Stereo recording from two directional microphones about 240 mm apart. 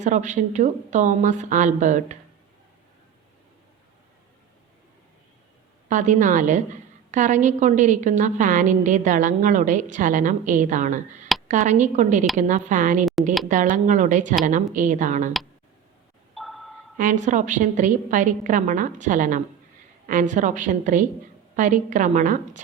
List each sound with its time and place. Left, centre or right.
0.0 s a woman's voice: right
5.9 s a woman's voice: right
16.3 s a sound: centre
17.0 s a woman's voice: right